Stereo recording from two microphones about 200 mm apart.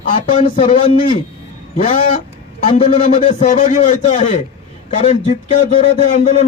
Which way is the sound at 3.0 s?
35° left (ahead or behind).